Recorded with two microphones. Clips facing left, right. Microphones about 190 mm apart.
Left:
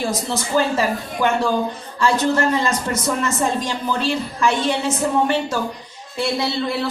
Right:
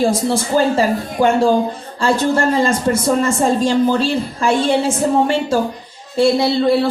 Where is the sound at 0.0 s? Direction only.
30° right (ahead or behind).